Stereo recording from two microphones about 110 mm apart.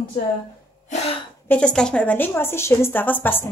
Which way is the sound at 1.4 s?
10° left (ahead or behind).